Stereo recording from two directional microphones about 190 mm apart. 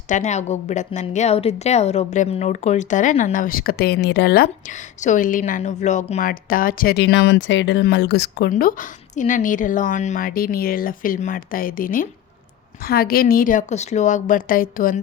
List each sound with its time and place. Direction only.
0.1 s a woman's voice: 40° left (ahead or behind)